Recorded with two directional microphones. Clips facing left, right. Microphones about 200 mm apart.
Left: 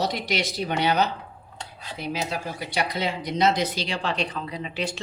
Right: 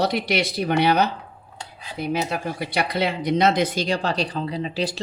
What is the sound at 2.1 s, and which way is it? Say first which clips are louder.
Speech: right 5 dB; 60° right (ahead or behind).